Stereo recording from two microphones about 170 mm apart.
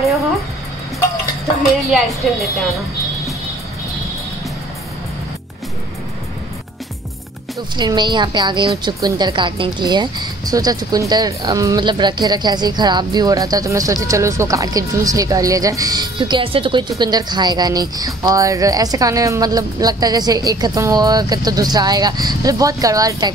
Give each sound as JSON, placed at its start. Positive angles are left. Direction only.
{"t": 1.9, "sound": "a woman's voice", "side_deg": 0}
{"t": 7.7, "sound": "a woman's voice", "side_deg": -25}